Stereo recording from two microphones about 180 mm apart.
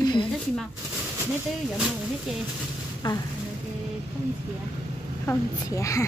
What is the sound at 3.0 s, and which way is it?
Speech, 25° left (ahead or behind).